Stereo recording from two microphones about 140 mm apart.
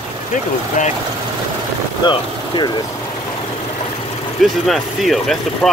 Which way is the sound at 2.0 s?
35° left (ahead or behind).